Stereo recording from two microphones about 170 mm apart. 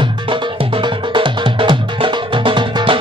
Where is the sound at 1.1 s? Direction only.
30° right (ahead or behind).